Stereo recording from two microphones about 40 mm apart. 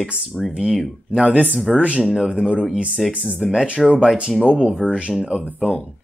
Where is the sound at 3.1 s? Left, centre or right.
Right.